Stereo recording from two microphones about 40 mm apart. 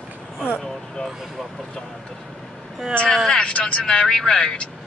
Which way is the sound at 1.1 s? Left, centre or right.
Centre.